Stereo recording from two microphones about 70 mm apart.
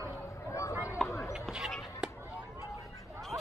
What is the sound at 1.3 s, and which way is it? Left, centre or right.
Basketball bounce, centre.